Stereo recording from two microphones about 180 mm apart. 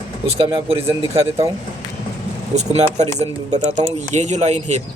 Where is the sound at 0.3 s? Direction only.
30° right (ahead or behind).